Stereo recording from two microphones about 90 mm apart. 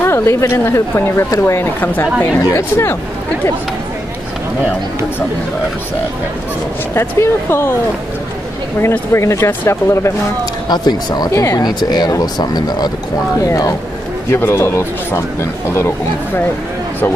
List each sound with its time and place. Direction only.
0.0 s a woman's voice: 30° left (ahead or behind)
6.9 s a woman's voice: 30° left (ahead or behind)
9.1 s speech: 30° left (ahead or behind)
10.7 s speech: 50° left (ahead or behind)
11.3 s speech: 35° left (ahead or behind)
11.6 s speech: 50° left (ahead or behind)
14.3 s a woman's voice: 25° left (ahead or behind)